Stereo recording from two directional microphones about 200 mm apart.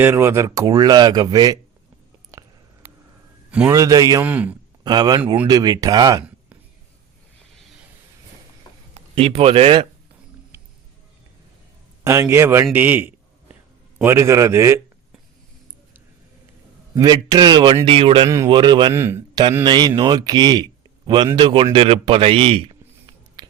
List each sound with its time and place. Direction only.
0.0 s speech: 10° right (ahead or behind)
2.3 s a sound: 15° right (ahead or behind)
3.7 s a man's voice: 15° right (ahead or behind)
4.8 s speech: 20° right (ahead or behind)
9.0 s speech: 30° right (ahead or behind)
12.0 s a man's voice: 15° right (ahead or behind)
16.9 s speech: 20° right (ahead or behind)
18.9 s speech: 10° right (ahead or behind)